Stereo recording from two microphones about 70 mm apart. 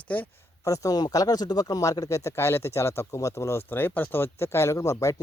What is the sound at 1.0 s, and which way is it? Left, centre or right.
Speech, left.